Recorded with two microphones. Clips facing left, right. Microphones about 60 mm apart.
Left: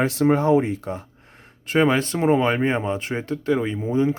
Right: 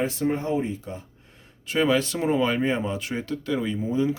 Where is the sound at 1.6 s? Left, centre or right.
Left.